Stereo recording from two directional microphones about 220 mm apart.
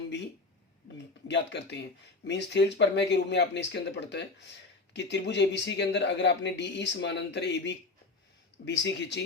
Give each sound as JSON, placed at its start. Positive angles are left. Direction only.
{"t": 1.3, "sound": "speech", "side_deg": 50}